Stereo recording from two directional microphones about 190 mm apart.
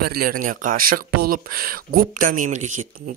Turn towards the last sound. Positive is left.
turn(degrees=-40)  # may be behind; listen again after turning